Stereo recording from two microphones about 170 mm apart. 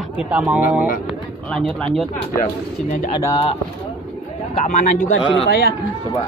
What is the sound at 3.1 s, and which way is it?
Speech, 25° left (ahead or behind).